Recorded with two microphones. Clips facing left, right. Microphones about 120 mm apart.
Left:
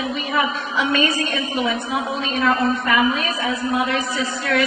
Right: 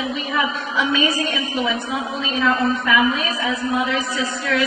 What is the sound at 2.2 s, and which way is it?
A woman's voice, centre (ahead or behind).